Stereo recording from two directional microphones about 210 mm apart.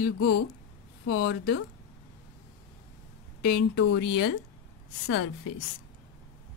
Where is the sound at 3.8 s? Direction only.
55° left (ahead or behind).